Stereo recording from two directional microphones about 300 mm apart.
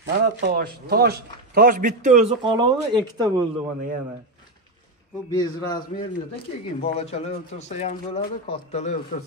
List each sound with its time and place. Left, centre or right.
0.0 s a man's voice: right; by 3.4 s centre
5.3 s speech: centre